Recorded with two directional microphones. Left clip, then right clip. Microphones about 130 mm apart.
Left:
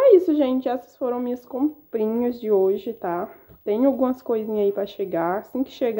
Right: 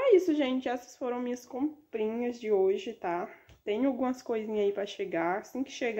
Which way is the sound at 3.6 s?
45° left (ahead or behind).